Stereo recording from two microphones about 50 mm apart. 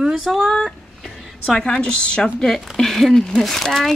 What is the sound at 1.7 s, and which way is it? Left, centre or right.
Speech, centre.